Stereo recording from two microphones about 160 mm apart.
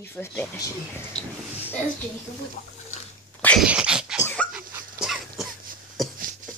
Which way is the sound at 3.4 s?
10° left (ahead or behind).